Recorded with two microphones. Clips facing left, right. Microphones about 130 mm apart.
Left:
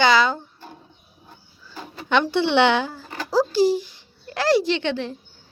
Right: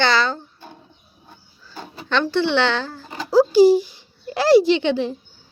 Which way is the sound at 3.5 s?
15° right (ahead or behind).